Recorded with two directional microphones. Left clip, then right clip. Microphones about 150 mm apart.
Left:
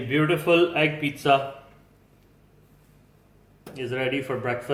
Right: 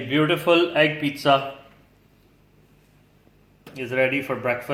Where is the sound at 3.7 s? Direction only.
35° right (ahead or behind).